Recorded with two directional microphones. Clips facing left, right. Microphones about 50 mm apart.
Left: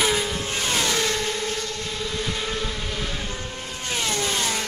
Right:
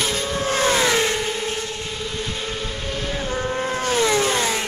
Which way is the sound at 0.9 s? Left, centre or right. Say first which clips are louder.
Right 4 dB; right.